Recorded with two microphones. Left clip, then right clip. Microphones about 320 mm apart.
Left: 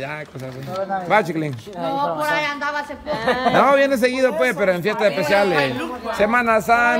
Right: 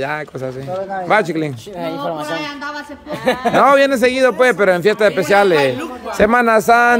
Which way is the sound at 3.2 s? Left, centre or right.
Right.